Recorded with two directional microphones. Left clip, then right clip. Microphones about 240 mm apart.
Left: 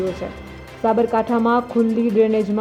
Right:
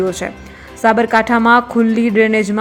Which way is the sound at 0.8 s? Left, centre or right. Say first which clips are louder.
Right 6 dB; centre.